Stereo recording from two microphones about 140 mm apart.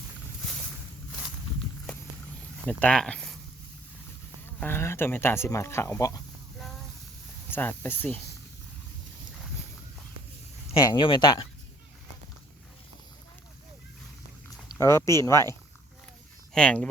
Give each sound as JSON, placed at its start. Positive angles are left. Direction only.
{"t": 2.6, "sound": "speech", "side_deg": 5}
{"t": 4.6, "sound": "speech", "side_deg": 15}
{"t": 7.5, "sound": "speech", "side_deg": 15}
{"t": 10.8, "sound": "speech", "side_deg": 35}
{"t": 14.8, "sound": "speech", "side_deg": 20}
{"t": 16.6, "sound": "speech", "side_deg": 5}